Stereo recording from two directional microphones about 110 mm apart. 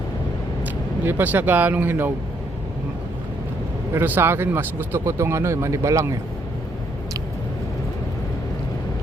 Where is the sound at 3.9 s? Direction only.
20° right (ahead or behind).